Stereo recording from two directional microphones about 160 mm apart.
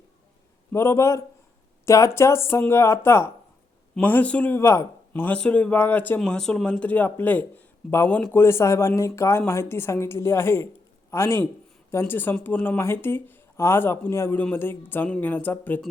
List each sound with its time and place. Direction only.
0.7 s a man's voice: 15° left (ahead or behind)